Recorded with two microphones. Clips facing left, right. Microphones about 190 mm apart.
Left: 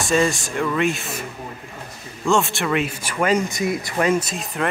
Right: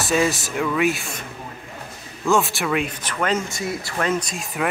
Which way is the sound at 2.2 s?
Centre (ahead or behind).